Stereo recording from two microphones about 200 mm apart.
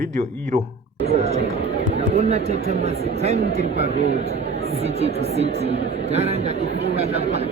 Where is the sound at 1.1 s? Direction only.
30° right (ahead or behind).